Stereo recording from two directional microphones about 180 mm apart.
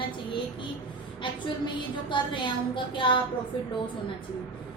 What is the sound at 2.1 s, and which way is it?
Child singing, 25° left (ahead or behind).